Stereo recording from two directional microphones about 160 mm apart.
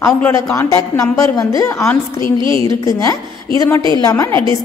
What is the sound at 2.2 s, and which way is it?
Speech, 30° right (ahead or behind).